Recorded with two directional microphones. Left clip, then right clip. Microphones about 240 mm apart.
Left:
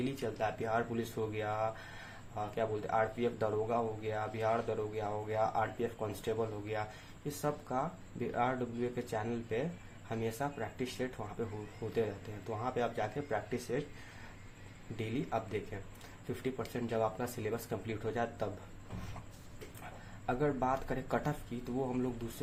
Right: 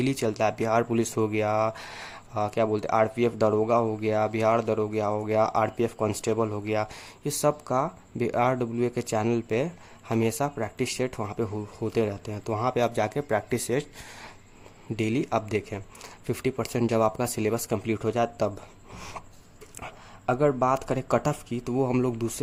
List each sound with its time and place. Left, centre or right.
0.0 s speech: right
14.9 s speech: right
20.2 s speech: right